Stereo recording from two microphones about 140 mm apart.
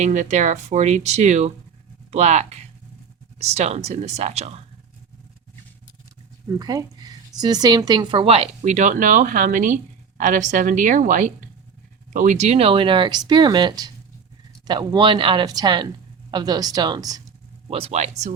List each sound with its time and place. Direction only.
0.0 s speech: 60° right (ahead or behind)
6.6 s speech: 30° right (ahead or behind)
8.6 s a woman's voice: 60° right (ahead or behind); by 17.2 s 25° right (ahead or behind)
17.7 s speech: 45° right (ahead or behind)